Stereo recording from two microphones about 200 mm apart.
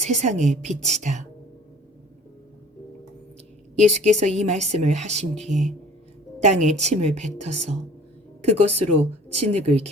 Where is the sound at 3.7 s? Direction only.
35° right (ahead or behind).